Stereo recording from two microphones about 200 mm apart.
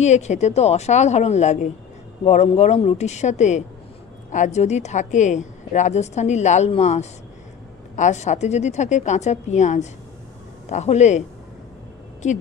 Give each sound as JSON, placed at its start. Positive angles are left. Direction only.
{"t": 0.0, "sound": "a woman's voice", "side_deg": 35}